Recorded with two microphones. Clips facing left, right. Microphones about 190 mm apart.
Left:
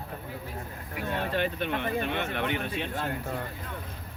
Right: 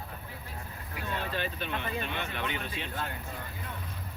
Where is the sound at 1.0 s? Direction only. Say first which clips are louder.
Left 5 dB; 55° left (ahead or behind).